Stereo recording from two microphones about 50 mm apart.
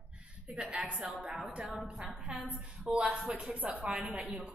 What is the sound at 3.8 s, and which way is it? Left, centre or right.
Speech, centre.